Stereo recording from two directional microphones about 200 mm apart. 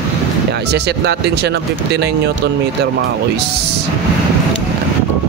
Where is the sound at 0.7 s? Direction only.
55° right (ahead or behind).